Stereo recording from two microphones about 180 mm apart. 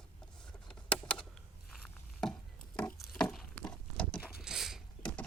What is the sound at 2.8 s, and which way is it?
Pig, 5° left (ahead or behind).